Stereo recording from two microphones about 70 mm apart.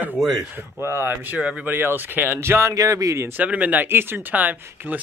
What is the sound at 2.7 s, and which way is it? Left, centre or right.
Speech, right.